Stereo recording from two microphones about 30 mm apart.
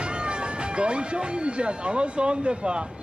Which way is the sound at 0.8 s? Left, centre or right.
Right.